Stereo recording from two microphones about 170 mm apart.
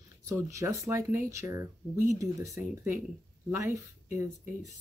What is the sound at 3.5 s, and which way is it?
Speech, 15° right (ahead or behind).